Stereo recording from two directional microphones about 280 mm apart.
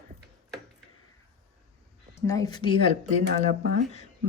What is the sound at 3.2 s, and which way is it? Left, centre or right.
Speech, right.